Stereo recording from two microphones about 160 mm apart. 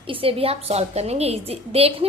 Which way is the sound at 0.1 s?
35° right (ahead or behind).